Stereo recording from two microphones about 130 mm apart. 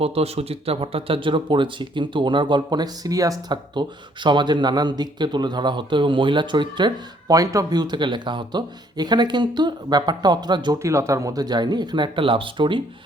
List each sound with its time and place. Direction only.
0.0 s speech: 50° right (ahead or behind)
10.8 s speech: 25° right (ahead or behind); by 12.8 s 40° right (ahead or behind)